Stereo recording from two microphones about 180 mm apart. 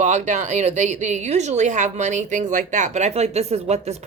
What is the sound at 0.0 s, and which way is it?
A woman's voice, 40° right (ahead or behind).